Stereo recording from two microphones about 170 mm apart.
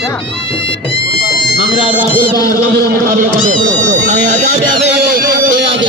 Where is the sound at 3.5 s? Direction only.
45° right (ahead or behind).